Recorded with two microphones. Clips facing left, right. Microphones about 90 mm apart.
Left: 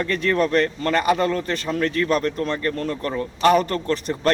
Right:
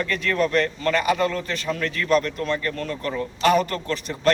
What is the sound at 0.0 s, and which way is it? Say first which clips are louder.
A man's voice: left 2 dB; 30° left (ahead or behind).